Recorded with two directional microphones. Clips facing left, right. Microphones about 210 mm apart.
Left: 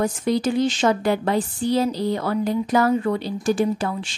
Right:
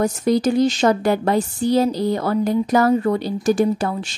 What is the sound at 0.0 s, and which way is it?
Speech, 40° right (ahead or behind).